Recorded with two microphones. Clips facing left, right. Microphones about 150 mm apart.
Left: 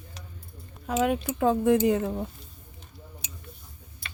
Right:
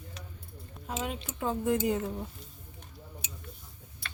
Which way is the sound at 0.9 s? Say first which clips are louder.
Left 11 dB; 70° left (ahead or behind).